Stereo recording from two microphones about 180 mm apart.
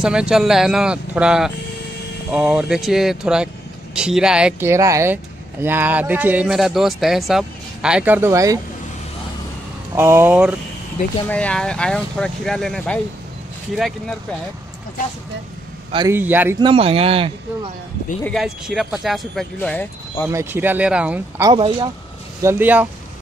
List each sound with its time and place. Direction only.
0.0 s speech: 5° right (ahead or behind)
9.9 s speech: 15° right (ahead or behind)
11.2 s speech: 5° left (ahead or behind)
16.1 s speech: 10° right (ahead or behind)
16.5 s speech: 30° right (ahead or behind)
18.2 s speech: centre (ahead or behind)
20.2 s speech: 15° right (ahead or behind)
21.4 s speech: 25° right (ahead or behind)
22.4 s speech: 10° right (ahead or behind)